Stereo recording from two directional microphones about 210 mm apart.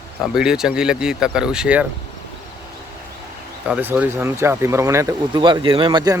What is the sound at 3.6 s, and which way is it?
A man's voice, 5° right (ahead or behind).